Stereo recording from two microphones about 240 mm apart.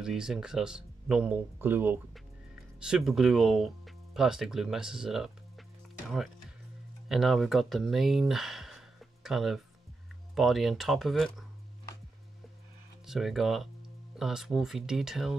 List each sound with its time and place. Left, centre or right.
0.0 s speech: centre
7.1 s speech: centre
13.0 s speech: centre